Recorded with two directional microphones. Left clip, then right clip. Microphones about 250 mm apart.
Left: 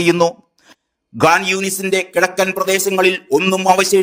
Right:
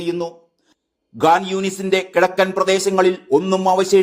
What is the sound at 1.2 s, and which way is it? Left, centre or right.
Speech, left.